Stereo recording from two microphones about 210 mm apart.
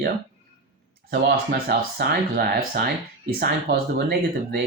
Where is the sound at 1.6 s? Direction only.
45° right (ahead or behind).